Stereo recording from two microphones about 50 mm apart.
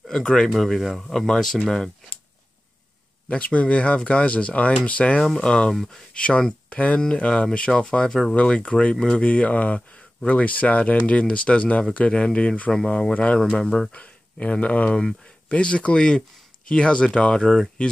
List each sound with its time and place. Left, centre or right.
0.1 s speech: centre
0.6 s speech: centre
3.3 s speech: left
12.7 s speech: centre
13.1 s speech: left